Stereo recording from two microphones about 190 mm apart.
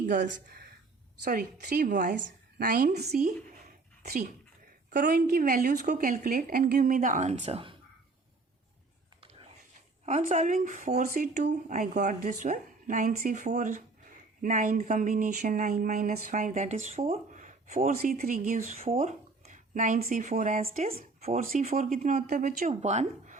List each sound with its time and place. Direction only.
0.1 s a woman's voice: 60° right (ahead or behind)
3.1 s speech: 40° right (ahead or behind)
4.0 s a woman's voice: 55° right (ahead or behind); by 7.8 s 30° right (ahead or behind)
10.1 s speech: 40° right (ahead or behind)
21.4 s a woman's voice: 45° right (ahead or behind)